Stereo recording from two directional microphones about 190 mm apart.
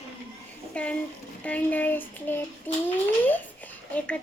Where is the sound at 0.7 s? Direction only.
5° left (ahead or behind).